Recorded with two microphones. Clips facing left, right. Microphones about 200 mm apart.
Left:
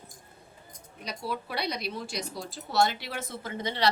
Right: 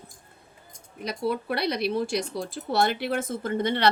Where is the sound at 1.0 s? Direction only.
55° right (ahead or behind).